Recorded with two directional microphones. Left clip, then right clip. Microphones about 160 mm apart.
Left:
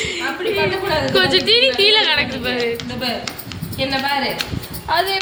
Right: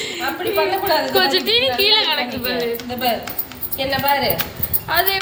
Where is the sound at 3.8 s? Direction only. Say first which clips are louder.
Right 1 dB; 90° right.